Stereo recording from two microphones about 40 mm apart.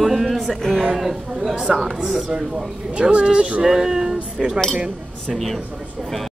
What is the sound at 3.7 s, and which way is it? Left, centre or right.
Speech, centre.